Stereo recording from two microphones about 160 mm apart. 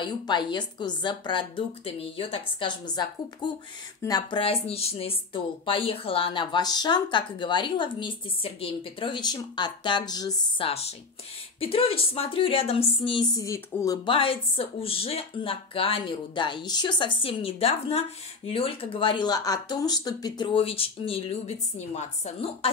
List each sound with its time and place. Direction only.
0.0 s speech: 30° left (ahead or behind)
4.4 s speech: 40° left (ahead or behind)
10.7 s speech: 40° left (ahead or behind); by 13.9 s 20° left (ahead or behind)
14.0 s speech: 35° left (ahead or behind)